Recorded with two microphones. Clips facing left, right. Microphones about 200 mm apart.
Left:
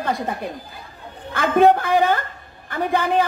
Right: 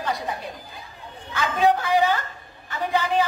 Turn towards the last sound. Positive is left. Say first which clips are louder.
# left 3 dB
turn(degrees=55)  # may be behind; listen again after turning